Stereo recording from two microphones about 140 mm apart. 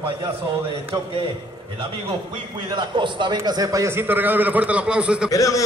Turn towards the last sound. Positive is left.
turn(degrees=25)  # may be behind; listen again after turning